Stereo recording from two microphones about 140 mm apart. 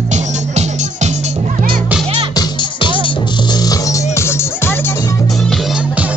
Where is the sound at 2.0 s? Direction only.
40° right (ahead or behind).